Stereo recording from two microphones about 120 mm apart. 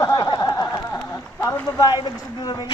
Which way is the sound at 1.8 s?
35° left (ahead or behind).